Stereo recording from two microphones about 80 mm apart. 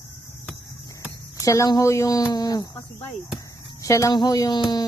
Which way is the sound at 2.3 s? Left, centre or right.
Left.